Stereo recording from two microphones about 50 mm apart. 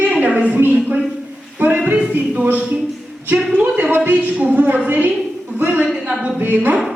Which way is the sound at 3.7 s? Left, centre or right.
Right.